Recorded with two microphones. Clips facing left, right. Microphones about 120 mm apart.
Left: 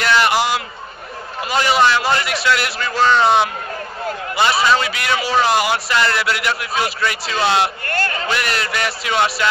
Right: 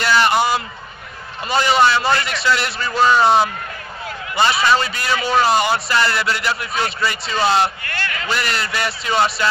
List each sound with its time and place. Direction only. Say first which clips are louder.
0.0 s a sound: even; centre (ahead or behind)
1.5 s a man's voice: even; centre (ahead or behind)
4.6 s a man's voice: even; centre (ahead or behind)
7.8 s a man's voice: left 5 dB; 45° left (ahead or behind)
8.3 s a man's voice: left 1 dB; centre (ahead or behind)